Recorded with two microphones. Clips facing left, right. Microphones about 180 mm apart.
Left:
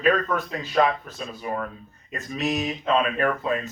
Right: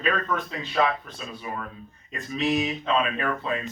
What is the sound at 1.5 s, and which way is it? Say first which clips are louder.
Speech: left 6 dB; 50° left (ahead or behind).